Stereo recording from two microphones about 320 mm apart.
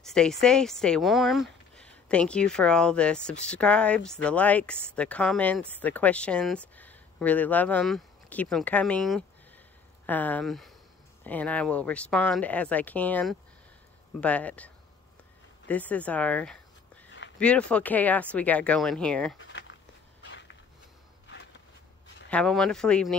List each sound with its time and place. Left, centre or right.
0.0 s speech: centre
15.7 s speech: centre
19.4 s a sound: left
22.3 s speech: centre